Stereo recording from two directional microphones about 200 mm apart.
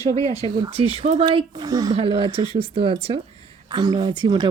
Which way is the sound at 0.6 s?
30° right (ahead or behind).